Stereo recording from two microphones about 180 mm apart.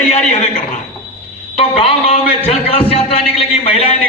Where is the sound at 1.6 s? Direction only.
35° left (ahead or behind).